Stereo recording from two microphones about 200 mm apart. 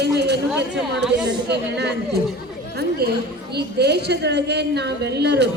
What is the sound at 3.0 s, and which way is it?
A woman's voice, 50° right (ahead or behind).